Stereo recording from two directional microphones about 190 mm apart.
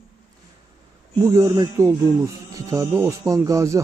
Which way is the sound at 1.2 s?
15° right (ahead or behind).